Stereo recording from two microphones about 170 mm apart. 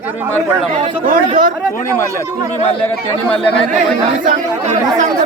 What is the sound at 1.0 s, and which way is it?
Speech, 50° right (ahead or behind).